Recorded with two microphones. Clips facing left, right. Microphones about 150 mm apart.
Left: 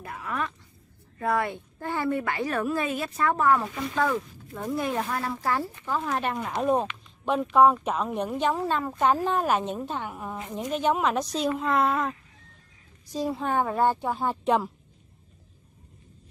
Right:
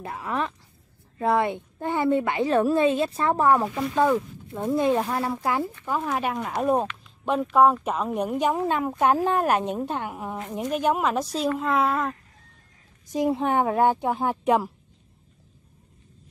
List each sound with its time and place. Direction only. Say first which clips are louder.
0.0 s a woman's voice: right 3 dB; 30° right (ahead or behind); by 12.2 s centre (ahead or behind)
13.1 s speech: right 4 dB; 20° right (ahead or behind)